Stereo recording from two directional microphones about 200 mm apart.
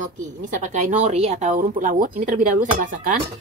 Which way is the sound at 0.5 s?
40° right (ahead or behind).